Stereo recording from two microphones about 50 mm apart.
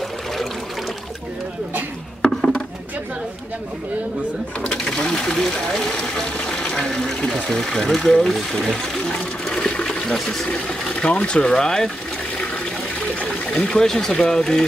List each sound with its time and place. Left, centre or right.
4.8 s speech: centre
7.4 s speech: centre
9.5 s toilet flush: left
10.5 s speech: centre
13.0 s a sound: left
13.6 s speech: centre